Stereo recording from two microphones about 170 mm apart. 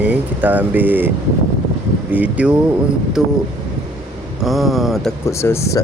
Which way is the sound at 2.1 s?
10° right (ahead or behind).